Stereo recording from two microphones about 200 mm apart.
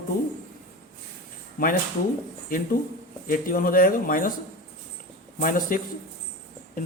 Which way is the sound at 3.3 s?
45° left (ahead or behind).